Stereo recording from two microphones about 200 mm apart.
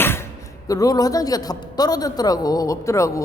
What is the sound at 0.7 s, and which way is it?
A woman's voice, 15° left (ahead or behind).